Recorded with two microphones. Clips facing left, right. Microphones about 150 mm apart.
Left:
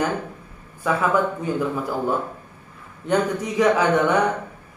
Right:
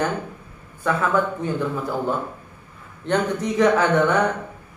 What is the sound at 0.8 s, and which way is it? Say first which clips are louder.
Speech: left 1 dB; 10° left (ahead or behind).